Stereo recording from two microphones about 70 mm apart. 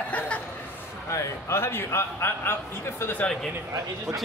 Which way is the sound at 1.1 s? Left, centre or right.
Left.